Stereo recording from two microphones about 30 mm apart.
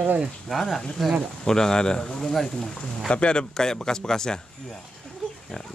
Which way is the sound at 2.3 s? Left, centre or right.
Centre.